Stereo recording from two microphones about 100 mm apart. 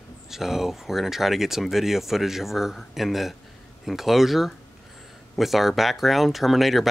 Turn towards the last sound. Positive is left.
turn(degrees=0)  # may be behind; listen again after turning